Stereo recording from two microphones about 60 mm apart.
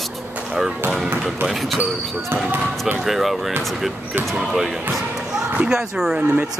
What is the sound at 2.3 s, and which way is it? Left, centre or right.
Speech, right.